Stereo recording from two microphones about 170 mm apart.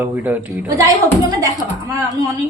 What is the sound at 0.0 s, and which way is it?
Speech, 10° right (ahead or behind).